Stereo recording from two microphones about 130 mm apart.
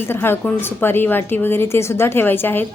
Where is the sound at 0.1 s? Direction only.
15° left (ahead or behind).